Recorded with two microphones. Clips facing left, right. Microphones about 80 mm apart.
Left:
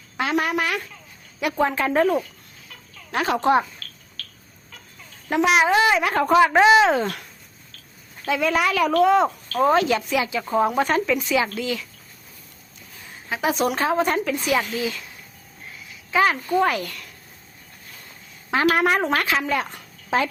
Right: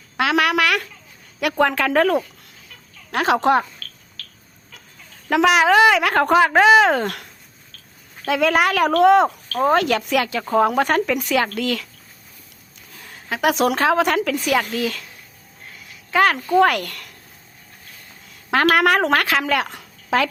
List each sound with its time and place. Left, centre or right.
0.2 s a woman's voice: right
5.3 s a woman's voice: right
8.3 s a woman's voice: right
13.1 s a woman's voice: right
14.5 s a woman's voice: right
16.1 s a woman's voice: right
18.5 s a woman's voice: right